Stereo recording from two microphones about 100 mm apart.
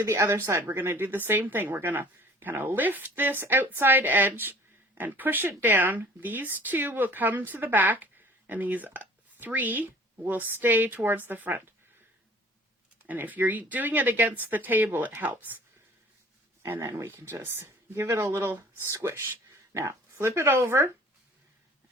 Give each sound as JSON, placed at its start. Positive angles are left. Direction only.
{"t": 0.0, "sound": "speech", "side_deg": -30}
{"t": 13.0, "sound": "speech", "side_deg": -20}
{"t": 16.6, "sound": "speech", "side_deg": -25}